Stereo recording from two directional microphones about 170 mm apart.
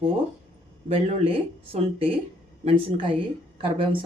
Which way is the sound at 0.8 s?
35° right (ahead or behind).